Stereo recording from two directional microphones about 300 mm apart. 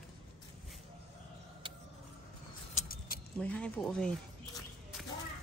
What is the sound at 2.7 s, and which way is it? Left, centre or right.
Keys jangling, left.